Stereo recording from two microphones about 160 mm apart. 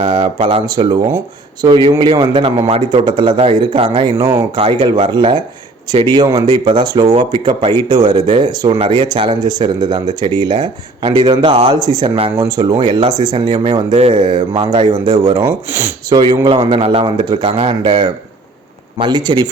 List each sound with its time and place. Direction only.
0.0 s a man's voice: 30° right (ahead or behind)
15.7 s speech: 15° right (ahead or behind)
16.1 s a man's voice: 25° right (ahead or behind)